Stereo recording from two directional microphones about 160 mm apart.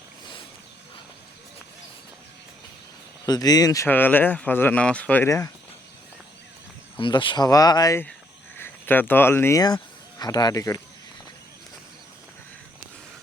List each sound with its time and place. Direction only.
3.2 s speech: 25° left (ahead or behind)
7.0 s speech: 30° left (ahead or behind)